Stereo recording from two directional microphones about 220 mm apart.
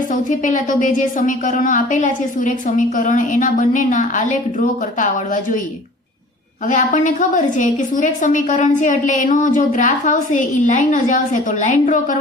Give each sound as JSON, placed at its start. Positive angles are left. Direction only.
{"t": 0.1, "sound": "a woman's voice", "side_deg": 35}
{"t": 6.7, "sound": "a woman's voice", "side_deg": 35}